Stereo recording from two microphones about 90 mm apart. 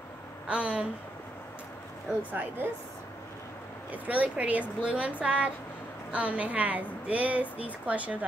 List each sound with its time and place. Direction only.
0.5 s a woman's voice: 10° right (ahead or behind)
2.3 s a woman's voice: 20° right (ahead or behind)
3.9 s a woman's voice: 15° right (ahead or behind)